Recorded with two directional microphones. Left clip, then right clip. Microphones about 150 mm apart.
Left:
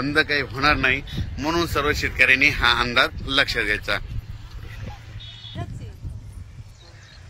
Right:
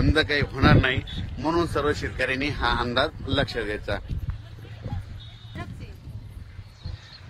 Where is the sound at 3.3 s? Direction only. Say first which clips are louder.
Left 7 dB; 45° right (ahead or behind).